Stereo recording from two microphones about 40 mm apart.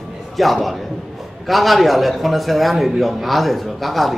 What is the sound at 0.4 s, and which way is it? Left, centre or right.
A man's voice, centre.